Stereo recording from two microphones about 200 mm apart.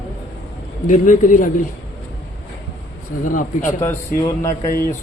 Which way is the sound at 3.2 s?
40° left (ahead or behind).